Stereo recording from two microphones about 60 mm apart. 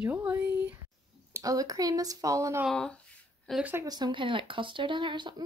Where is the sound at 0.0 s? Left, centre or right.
Right.